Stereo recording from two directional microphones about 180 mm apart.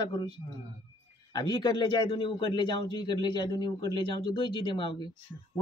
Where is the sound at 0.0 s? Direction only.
25° left (ahead or behind).